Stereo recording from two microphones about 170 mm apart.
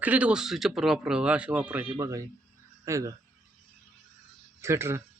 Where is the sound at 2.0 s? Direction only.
20° right (ahead or behind).